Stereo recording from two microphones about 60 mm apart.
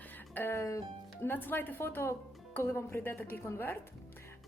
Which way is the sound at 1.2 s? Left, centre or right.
Left.